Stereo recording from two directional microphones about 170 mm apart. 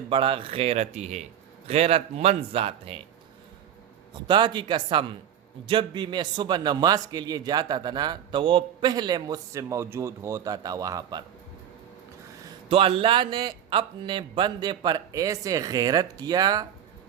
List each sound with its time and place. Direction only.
0.1 s speech: 30° right (ahead or behind)
4.1 s a man's voice: 25° right (ahead or behind)
12.6 s a man's voice: 30° right (ahead or behind)